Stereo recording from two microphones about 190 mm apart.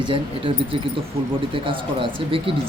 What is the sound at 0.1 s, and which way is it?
Speech, 30° right (ahead or behind).